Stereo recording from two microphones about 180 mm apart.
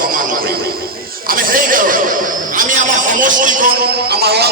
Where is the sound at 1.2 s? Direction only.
50° right (ahead or behind).